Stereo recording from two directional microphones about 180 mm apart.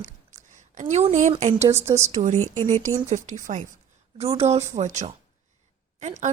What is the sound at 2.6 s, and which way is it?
A woman's voice, 40° right (ahead or behind).